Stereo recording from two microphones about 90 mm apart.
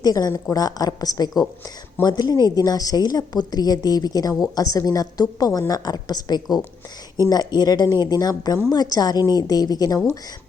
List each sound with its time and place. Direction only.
0.0 s a woman's voice: 45° left (ahead or behind)